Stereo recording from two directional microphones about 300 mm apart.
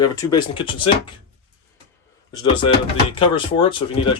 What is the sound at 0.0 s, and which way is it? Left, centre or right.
Speech, centre.